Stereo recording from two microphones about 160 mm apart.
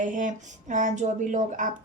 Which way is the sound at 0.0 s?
55° right (ahead or behind).